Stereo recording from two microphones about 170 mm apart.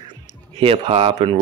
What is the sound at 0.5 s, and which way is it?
Speech, 35° right (ahead or behind).